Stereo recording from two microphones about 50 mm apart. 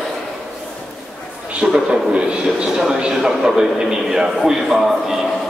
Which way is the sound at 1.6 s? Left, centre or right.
Centre.